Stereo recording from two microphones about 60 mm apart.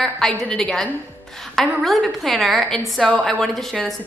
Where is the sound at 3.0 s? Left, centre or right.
Centre.